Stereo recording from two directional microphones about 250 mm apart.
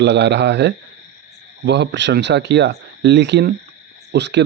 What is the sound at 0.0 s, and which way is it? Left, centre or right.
Speech, right.